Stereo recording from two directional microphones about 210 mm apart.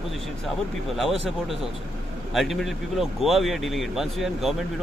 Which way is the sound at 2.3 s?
Centre (ahead or behind).